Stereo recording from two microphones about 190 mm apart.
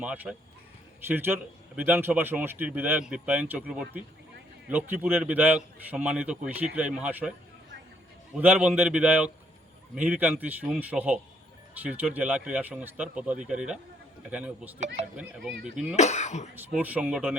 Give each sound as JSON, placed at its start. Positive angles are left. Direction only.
{"t": 0.0, "sound": "a man's voice", "side_deg": -5}
{"t": 8.4, "sound": "a man's voice", "side_deg": -5}
{"t": 16.0, "sound": "speech", "side_deg": 35}
{"t": 16.6, "sound": "a man's voice", "side_deg": -10}